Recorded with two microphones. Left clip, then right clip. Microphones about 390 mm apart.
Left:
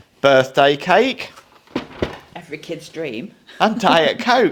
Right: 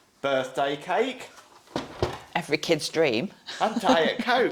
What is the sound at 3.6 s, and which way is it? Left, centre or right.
Speech, left.